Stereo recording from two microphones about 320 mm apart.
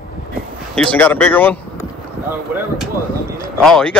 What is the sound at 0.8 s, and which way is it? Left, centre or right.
Speech, centre.